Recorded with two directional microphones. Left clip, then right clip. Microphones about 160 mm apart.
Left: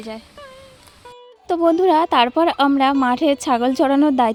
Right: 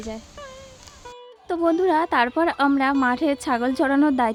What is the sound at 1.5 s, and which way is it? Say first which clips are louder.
A woman's voice: left 5 dB; 25° left (ahead or behind).